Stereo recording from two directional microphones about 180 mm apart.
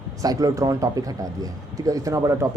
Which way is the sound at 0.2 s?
20° right (ahead or behind).